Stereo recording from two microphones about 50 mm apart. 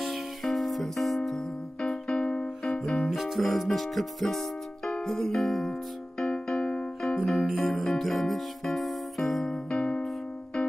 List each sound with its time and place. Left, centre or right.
0.0 s music: centre
2.0 s keyboard: centre
2.8 s music: left
3.1 s speech: centre
5.0 s music: centre
6.1 s keyboard: centre
7.2 s music: centre
9.7 s music: left